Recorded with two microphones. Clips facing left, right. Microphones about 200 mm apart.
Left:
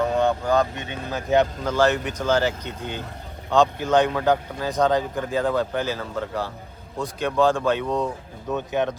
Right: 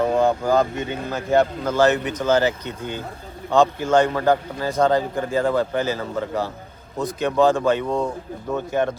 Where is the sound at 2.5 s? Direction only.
50° right (ahead or behind).